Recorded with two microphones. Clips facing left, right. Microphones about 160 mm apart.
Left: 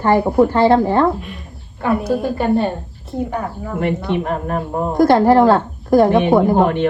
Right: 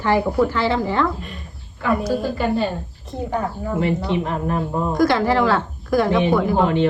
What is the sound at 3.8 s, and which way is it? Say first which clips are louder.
Speech: left 2 dB; 55° left (ahead or behind).